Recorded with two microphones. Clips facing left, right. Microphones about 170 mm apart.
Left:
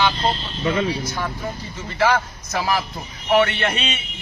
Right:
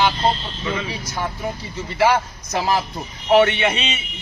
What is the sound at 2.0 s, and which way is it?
Speech, 15° right (ahead or behind).